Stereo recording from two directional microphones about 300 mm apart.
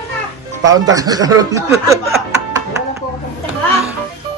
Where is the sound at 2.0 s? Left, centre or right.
Centre.